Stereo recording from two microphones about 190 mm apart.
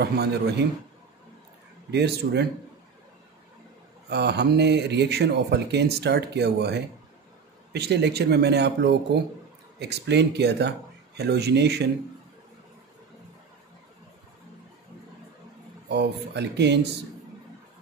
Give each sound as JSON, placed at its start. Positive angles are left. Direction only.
{"t": 0.0, "sound": "speech", "side_deg": -60}
{"t": 1.9, "sound": "speech", "side_deg": -60}
{"t": 4.1, "sound": "speech", "side_deg": -60}
{"t": 15.9, "sound": "speech", "side_deg": -60}